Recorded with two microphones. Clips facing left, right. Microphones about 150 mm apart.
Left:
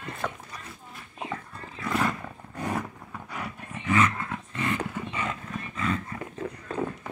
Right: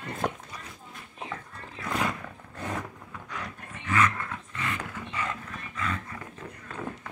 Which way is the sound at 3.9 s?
25° left (ahead or behind).